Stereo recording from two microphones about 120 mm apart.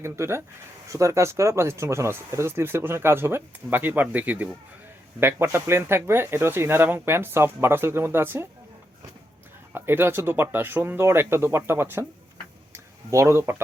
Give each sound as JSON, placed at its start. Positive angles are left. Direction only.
{"t": 0.0, "sound": "speech", "side_deg": -20}
{"t": 9.7, "sound": "speech", "side_deg": -20}